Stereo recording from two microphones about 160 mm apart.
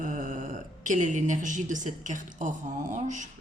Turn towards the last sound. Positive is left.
turn(degrees=-50)  # may be behind; listen again after turning